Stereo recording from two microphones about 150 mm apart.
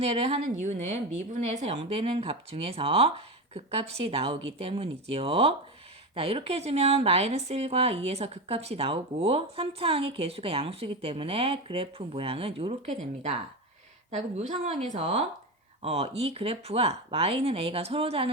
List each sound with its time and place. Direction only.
0.0 s a woman's voice: 45° right (ahead or behind)